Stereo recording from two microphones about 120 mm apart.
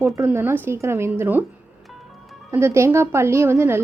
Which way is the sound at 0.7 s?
20° right (ahead or behind).